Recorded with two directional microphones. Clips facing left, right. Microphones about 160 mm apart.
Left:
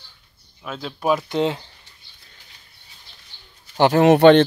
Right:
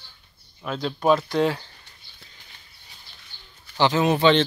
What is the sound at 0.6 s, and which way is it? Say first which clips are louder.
Speech: right 3 dB; 5° left (ahead or behind).